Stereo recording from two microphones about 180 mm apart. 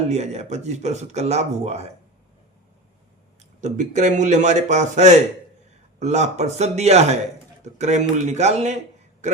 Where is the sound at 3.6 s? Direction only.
40° right (ahead or behind).